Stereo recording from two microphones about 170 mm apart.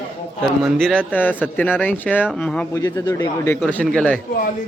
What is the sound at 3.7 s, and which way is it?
Speech, 5° left (ahead or behind).